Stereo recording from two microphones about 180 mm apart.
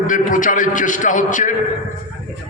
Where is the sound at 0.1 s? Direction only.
45° left (ahead or behind).